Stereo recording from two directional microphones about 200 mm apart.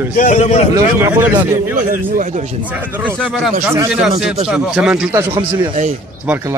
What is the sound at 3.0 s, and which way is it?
Speech, centre (ahead or behind).